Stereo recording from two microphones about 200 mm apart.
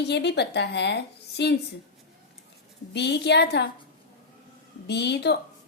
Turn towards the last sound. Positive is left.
turn(degrees=55)  # may be behind; listen again after turning